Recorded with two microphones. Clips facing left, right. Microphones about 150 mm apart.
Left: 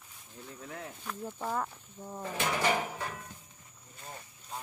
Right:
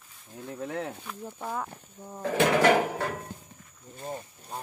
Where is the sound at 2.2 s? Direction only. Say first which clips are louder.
Right 9 dB; 75° right (ahead or behind).